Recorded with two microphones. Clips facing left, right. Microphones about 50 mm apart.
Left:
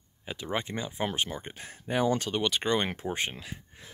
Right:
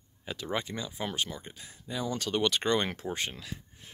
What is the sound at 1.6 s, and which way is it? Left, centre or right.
Speech, left.